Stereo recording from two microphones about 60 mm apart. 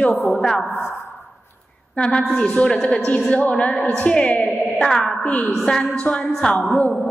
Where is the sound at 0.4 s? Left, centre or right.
Centre.